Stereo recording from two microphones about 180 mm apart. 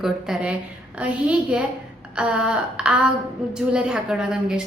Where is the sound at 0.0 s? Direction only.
5° right (ahead or behind).